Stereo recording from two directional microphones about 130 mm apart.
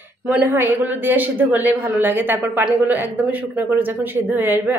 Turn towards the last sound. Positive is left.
turn(degrees=-15)  # may be behind; listen again after turning